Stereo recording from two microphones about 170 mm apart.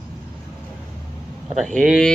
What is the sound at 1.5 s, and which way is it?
Speech, centre (ahead or behind).